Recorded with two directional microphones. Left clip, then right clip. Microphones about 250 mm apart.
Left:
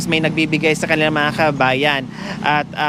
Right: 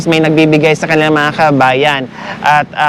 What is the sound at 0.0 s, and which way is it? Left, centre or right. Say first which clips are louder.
Speech: right 8 dB; centre.